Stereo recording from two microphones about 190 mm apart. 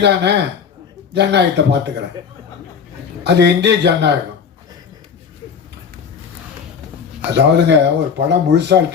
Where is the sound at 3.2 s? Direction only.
65° right (ahead or behind).